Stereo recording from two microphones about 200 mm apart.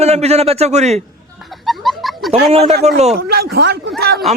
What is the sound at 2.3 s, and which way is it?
Speech, 30° right (ahead or behind).